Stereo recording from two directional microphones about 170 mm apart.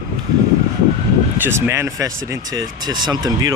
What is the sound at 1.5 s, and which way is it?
Speech, 15° right (ahead or behind).